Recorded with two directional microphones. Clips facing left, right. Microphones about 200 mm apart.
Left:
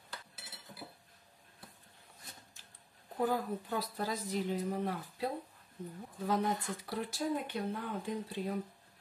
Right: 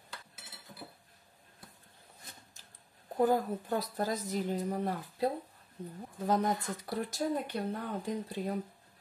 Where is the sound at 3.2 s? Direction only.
45° right (ahead or behind).